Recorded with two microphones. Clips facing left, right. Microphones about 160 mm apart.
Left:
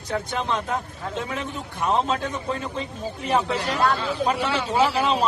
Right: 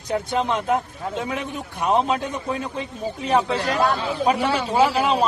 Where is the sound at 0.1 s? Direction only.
20° right (ahead or behind).